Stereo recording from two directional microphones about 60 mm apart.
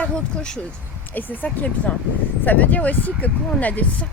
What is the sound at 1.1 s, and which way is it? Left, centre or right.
Speech, left.